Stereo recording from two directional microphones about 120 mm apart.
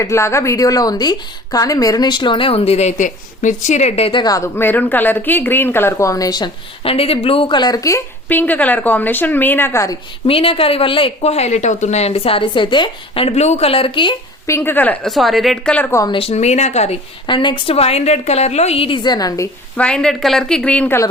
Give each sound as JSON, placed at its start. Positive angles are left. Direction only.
{"t": 0.0, "sound": "a woman's voice", "side_deg": 25}
{"t": 4.2, "sound": "speech", "side_deg": 30}
{"t": 6.8, "sound": "speech", "side_deg": 55}
{"t": 8.3, "sound": "a woman's voice", "side_deg": 15}
{"t": 10.2, "sound": "speech", "side_deg": 50}
{"t": 14.4, "sound": "speech", "side_deg": 20}
{"t": 15.0, "sound": "speech", "side_deg": 0}
{"t": 16.0, "sound": "a woman's voice", "side_deg": 50}
{"t": 17.2, "sound": "a woman's voice", "side_deg": 40}
{"t": 17.7, "sound": "a woman's voice", "side_deg": 60}
{"t": 19.7, "sound": "a woman's voice", "side_deg": 10}